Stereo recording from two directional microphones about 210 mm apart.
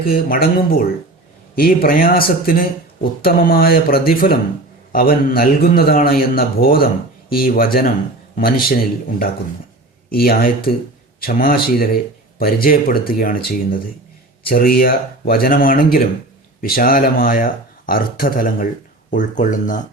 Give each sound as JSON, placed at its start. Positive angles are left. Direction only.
{"t": 0.0, "sound": "speech", "side_deg": 45}